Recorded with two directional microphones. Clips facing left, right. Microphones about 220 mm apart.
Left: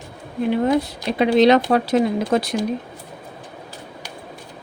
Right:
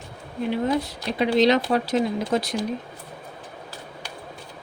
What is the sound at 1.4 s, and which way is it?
Speech, 60° left (ahead or behind).